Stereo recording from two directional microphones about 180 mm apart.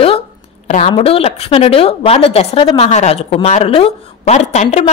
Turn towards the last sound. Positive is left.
turn(degrees=40)  # may be behind; listen again after turning